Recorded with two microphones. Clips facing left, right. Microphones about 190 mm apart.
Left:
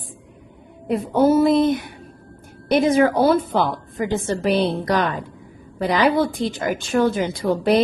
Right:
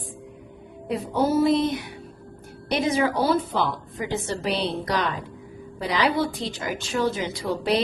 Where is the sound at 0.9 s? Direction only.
55° left (ahead or behind).